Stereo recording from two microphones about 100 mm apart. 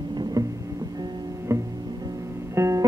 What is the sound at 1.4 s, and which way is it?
Music, 30° right (ahead or behind).